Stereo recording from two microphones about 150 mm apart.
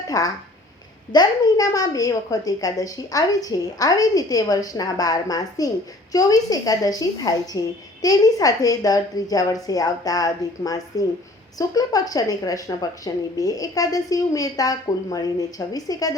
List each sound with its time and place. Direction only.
0.1 s a woman's voice: 25° left (ahead or behind)